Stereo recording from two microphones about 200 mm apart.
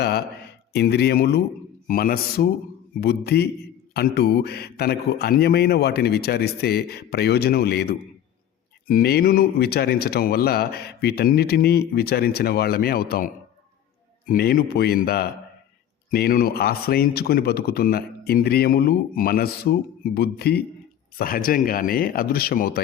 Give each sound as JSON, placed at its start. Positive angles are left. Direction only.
{"t": 0.0, "sound": "a man's voice", "side_deg": 55}